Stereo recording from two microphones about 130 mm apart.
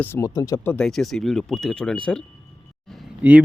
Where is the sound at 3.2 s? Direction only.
10° right (ahead or behind).